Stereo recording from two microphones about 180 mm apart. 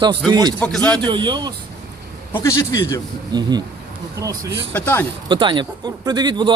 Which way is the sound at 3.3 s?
20° right (ahead or behind).